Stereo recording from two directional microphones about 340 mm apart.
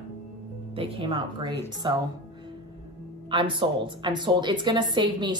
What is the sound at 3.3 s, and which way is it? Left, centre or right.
A woman's voice, centre.